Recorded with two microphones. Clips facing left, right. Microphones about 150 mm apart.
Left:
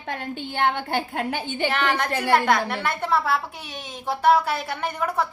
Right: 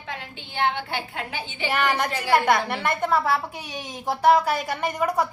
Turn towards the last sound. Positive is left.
turn(degrees=-10)  # may be behind; listen again after turning